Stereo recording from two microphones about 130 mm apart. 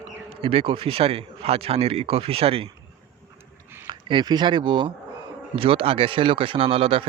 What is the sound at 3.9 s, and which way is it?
Speech, 40° right (ahead or behind).